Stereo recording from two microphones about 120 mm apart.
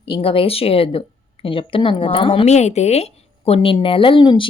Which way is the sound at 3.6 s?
45° left (ahead or behind).